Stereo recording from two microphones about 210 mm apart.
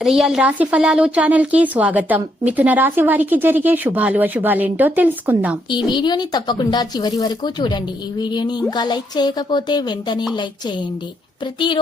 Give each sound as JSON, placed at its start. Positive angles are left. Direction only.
{"t": 0.0, "sound": "a woman's voice", "side_deg": 0}
{"t": 5.7, "sound": "a woman's voice", "side_deg": 20}